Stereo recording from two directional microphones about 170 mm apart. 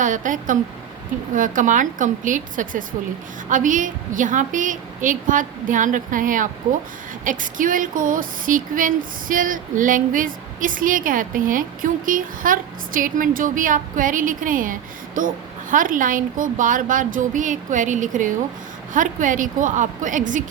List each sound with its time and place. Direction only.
0.0 s speech: 50° right (ahead or behind)